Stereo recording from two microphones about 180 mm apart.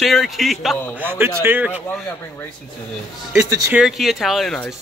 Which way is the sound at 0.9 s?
10° right (ahead or behind).